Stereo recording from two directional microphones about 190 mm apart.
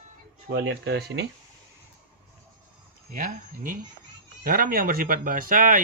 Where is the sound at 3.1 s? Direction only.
45° right (ahead or behind).